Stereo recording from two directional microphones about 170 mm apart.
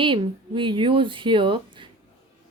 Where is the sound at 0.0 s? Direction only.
30° right (ahead or behind).